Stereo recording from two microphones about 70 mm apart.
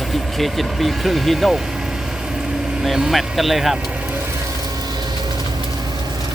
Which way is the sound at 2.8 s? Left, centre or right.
Centre.